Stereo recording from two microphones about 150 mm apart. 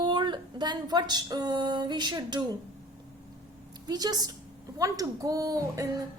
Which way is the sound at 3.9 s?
25° right (ahead or behind).